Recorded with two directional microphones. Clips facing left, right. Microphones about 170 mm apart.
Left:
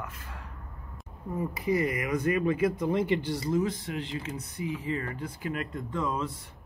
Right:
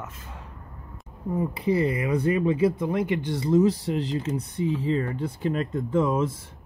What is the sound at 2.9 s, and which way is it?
Speech, 15° right (ahead or behind).